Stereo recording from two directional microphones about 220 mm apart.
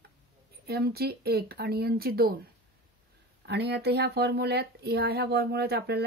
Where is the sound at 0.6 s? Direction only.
45° right (ahead or behind).